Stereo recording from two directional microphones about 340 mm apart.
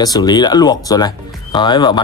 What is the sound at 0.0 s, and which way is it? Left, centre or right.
Speech, centre.